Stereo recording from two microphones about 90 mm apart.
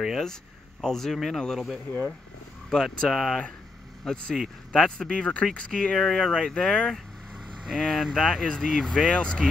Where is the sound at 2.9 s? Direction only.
Centre (ahead or behind).